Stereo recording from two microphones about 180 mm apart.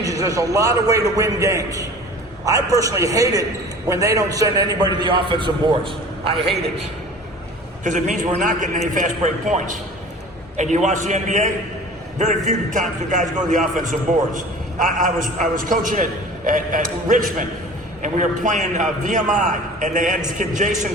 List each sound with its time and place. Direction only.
0.0 s a man's voice: 20° right (ahead or behind)
7.9 s a man's voice: 45° right (ahead or behind)